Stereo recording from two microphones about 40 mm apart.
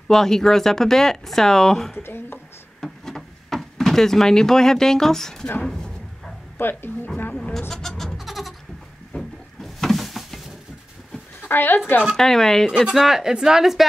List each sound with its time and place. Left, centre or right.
0.1 s speech: centre
2.0 s speech: left
2.8 s a sound: centre
6.6 s speech: left
8.3 s goat: centre
9.1 s a sound: centre
11.4 s speech: left
12.2 s speech: centre
12.7 s speech: centre